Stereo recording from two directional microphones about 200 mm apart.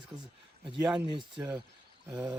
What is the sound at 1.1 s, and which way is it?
Speech, 25° right (ahead or behind).